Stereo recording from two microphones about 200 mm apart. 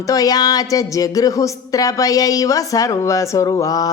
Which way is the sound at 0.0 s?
15° left (ahead or behind).